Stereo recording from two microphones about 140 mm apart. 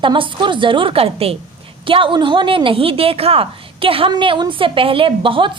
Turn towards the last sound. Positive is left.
turn(degrees=-40)  # may be behind; listen again after turning